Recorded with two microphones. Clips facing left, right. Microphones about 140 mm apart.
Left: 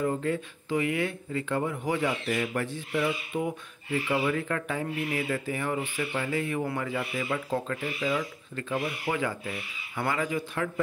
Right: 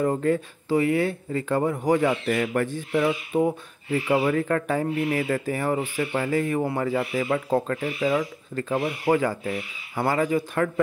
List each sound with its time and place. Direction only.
0.0 s speech: 45° right (ahead or behind)
7.0 s speech: 50° right (ahead or behind)